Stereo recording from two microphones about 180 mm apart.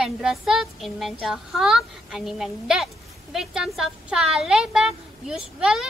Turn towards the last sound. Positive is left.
turn(degrees=-5)  # may be behind; listen again after turning